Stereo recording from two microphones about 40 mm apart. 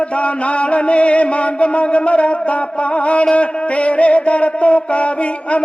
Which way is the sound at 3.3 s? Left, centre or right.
Left.